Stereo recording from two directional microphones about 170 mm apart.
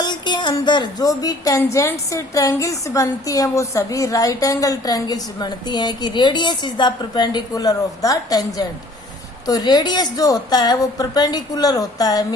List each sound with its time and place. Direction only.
0.0 s speech: 25° left (ahead or behind)